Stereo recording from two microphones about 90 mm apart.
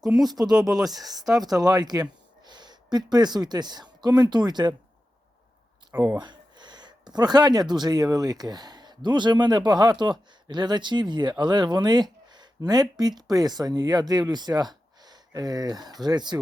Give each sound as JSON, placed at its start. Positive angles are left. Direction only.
{"t": 0.0, "sound": "speech", "side_deg": -5}
{"t": 1.5, "sound": "speech", "side_deg": -45}
{"t": 6.0, "sound": "speech", "side_deg": -40}
{"t": 6.2, "sound": "a sound", "side_deg": -55}
{"t": 7.2, "sound": "speech", "side_deg": -50}